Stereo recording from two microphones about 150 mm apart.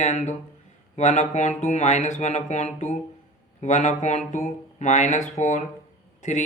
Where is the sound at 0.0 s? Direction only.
50° left (ahead or behind).